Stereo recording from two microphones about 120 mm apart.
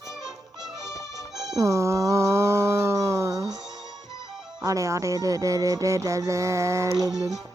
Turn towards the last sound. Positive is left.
turn(degrees=-30)  # may be behind; listen again after turning